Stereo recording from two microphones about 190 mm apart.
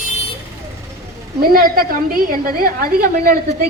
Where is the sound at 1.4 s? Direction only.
50° right (ahead or behind).